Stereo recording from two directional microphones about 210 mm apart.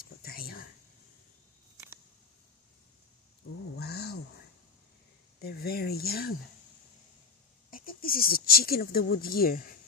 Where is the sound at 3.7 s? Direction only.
50° left (ahead or behind).